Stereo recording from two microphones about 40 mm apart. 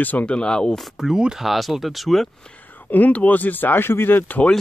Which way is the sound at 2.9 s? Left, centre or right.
Left.